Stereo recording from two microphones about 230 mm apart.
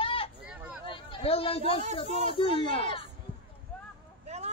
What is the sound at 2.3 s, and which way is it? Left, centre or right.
Speech, left.